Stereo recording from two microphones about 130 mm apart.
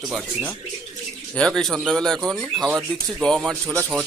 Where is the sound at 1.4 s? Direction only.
5° left (ahead or behind).